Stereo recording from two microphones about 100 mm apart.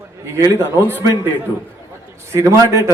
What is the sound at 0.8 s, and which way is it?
Speech, 20° right (ahead or behind).